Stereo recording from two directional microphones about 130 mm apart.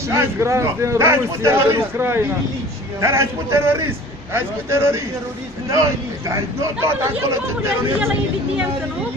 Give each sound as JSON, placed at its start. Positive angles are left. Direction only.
{"t": 0.1, "sound": "speech", "side_deg": -20}